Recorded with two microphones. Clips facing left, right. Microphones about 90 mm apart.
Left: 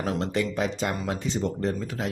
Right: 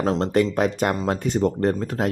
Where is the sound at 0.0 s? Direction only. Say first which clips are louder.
Right 7 dB; 40° right (ahead or behind).